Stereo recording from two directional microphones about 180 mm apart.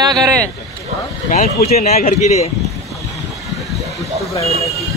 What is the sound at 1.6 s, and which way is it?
Speech, 40° left (ahead or behind).